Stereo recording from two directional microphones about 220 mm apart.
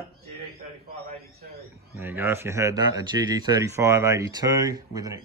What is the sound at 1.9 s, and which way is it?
A man's voice, 10° right (ahead or behind).